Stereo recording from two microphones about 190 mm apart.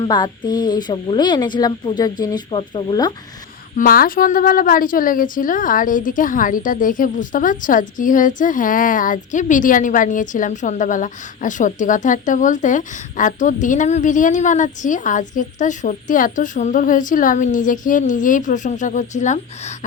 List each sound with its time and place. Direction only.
0.0 s speech: 20° left (ahead or behind)
3.8 s a woman's voice: 50° left (ahead or behind)